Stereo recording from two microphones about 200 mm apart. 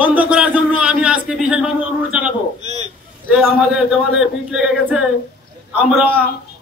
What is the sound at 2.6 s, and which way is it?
Speech, 35° right (ahead or behind).